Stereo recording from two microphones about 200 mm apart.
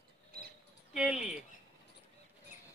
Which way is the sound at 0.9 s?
5° right (ahead or behind).